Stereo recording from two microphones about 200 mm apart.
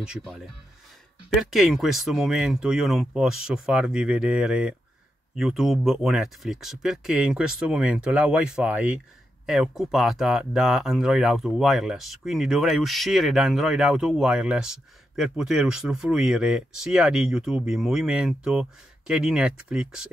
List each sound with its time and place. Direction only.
0.0 s speech: 5° right (ahead or behind)
1.4 s speech: centre (ahead or behind)